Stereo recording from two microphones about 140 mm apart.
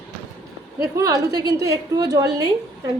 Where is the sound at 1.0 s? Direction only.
25° right (ahead or behind).